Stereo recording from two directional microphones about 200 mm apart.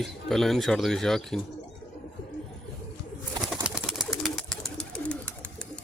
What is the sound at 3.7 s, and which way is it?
Pigeon, 5° right (ahead or behind).